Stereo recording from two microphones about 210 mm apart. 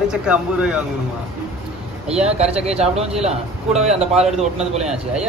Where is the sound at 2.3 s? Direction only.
30° right (ahead or behind).